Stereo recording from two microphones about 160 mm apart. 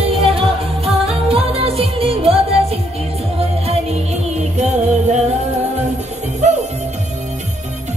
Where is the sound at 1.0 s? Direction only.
35° right (ahead or behind).